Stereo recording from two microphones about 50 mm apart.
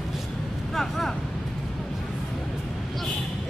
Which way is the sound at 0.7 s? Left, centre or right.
Centre.